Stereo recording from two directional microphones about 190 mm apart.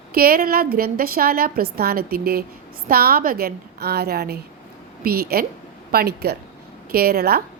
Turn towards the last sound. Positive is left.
turn(degrees=-55)  # may be behind; listen again after turning